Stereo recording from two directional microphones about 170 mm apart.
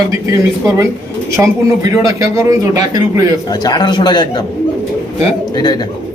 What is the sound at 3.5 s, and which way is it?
Speech, 25° left (ahead or behind).